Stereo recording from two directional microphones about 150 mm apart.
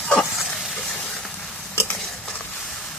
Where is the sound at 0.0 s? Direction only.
5° left (ahead or behind).